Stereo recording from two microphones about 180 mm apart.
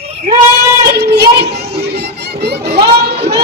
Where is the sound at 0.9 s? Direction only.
60° right (ahead or behind).